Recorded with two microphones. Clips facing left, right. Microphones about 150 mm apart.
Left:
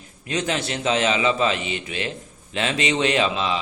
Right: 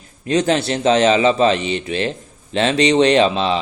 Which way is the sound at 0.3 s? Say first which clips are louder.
Right 8 dB; 35° right (ahead or behind).